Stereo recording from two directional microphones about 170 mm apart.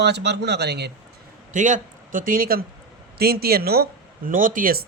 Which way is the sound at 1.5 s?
50° right (ahead or behind).